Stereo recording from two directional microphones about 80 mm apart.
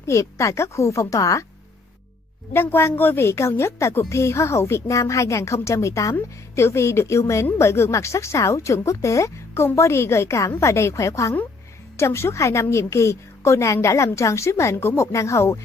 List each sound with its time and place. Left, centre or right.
0.0 s a woman's voice: left
2.5 s a woman's voice: left